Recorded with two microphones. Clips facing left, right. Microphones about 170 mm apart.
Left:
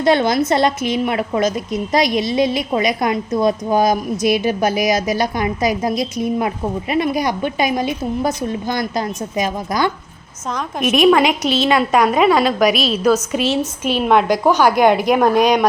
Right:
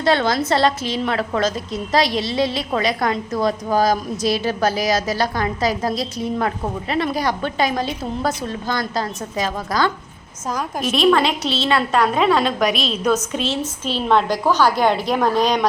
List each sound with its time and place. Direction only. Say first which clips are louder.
0.0 s a woman's voice: left 3 dB; 20° left (ahead or behind)